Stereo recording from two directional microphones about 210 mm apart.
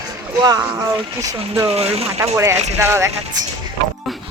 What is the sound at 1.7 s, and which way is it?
Speech, 30° right (ahead or behind).